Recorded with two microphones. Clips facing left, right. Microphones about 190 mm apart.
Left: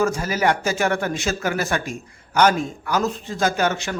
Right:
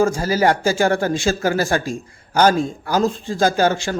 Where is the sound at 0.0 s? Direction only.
30° right (ahead or behind).